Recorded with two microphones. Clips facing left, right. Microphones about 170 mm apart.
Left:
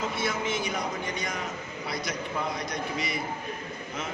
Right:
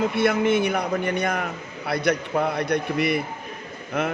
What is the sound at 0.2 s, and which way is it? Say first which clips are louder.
A man's voice: right 13 dB; 60° right (ahead or behind).